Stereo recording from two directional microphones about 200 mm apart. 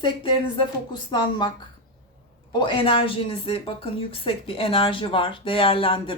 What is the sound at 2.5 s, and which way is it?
Speech, 25° left (ahead or behind).